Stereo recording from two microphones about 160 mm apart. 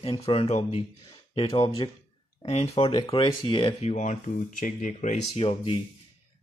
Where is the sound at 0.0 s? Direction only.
35° left (ahead or behind).